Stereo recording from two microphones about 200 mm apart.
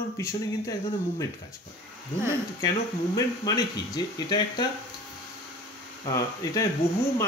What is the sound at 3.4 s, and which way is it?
Speech, 20° left (ahead or behind).